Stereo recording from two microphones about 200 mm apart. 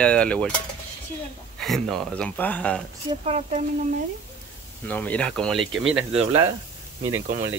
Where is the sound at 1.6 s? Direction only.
Centre (ahead or behind).